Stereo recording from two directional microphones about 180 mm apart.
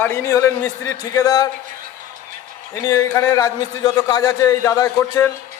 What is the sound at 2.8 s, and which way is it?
A man's voice, 20° left (ahead or behind).